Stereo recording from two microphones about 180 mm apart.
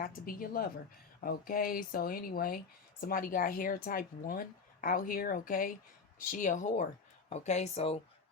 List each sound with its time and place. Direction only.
0.0 s speech: 50° left (ahead or behind); by 8.0 s 35° left (ahead or behind)